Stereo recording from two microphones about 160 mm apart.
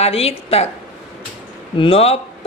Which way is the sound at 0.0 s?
40° left (ahead or behind).